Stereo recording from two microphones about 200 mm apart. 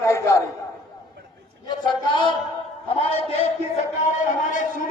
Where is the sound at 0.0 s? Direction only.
15° left (ahead or behind).